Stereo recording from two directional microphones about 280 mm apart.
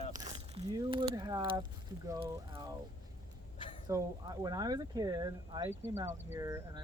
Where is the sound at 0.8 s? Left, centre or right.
Centre.